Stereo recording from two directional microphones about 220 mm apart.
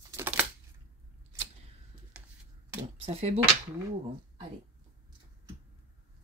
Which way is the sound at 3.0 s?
25° right (ahead or behind).